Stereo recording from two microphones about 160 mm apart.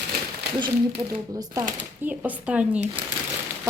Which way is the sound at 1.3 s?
20° right (ahead or behind).